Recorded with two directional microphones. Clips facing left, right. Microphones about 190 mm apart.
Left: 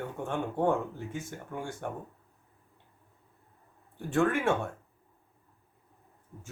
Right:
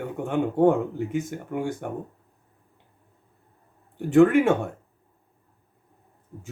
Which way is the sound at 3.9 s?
15° right (ahead or behind).